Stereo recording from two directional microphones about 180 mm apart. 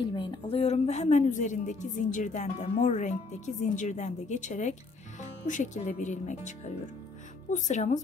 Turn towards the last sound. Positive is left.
turn(degrees=40)  # may be behind; listen again after turning